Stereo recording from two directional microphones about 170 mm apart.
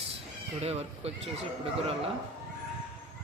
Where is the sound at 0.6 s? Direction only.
40° right (ahead or behind).